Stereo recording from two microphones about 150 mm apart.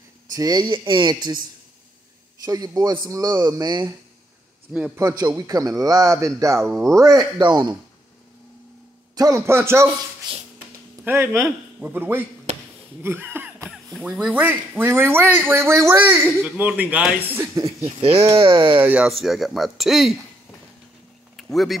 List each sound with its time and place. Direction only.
0.3 s a man's voice: 25° right (ahead or behind)
2.4 s a man's voice: 25° right (ahead or behind)
4.9 s a man's voice: 25° right (ahead or behind)
9.1 s speech: 20° right (ahead or behind)
10.3 s a man's voice: 30° right (ahead or behind)
11.1 s speech: 15° right (ahead or behind)
12.5 s a sound: 45° right (ahead or behind)
13.0 s a sound: 15° right (ahead or behind)
14.0 s speech: 10° right (ahead or behind)
18.4 s speech: 35° right (ahead or behind)
18.8 s speech: 10° right (ahead or behind)
21.4 s speech: centre (ahead or behind)